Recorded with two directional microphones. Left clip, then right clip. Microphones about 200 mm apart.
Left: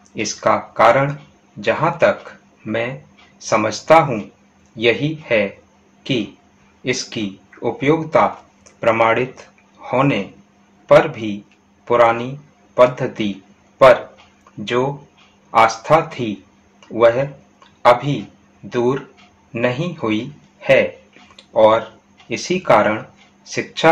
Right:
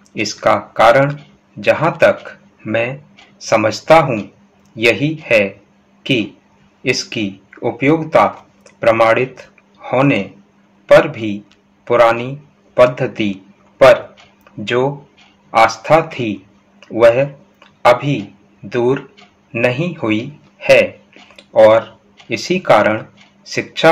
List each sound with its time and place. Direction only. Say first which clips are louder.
0.1 s speech: right 3 dB; 15° right (ahead or behind)
6.8 s speech: right 4 dB; 15° right (ahead or behind)
14.6 s speech: right 3 dB; 15° right (ahead or behind)
18.7 s a man's voice: right 3 dB; 15° right (ahead or behind)